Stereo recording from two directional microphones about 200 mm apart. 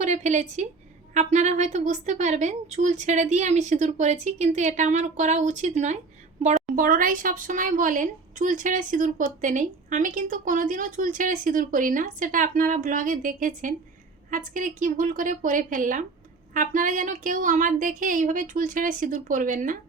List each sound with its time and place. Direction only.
0.0 s a woman's voice: 35° right (ahead or behind)